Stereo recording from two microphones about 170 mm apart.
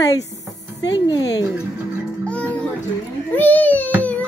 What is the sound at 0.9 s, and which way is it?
Speech, 25° left (ahead or behind).